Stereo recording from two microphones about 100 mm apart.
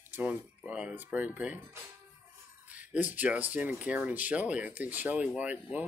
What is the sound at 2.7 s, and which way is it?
Speech, 15° right (ahead or behind).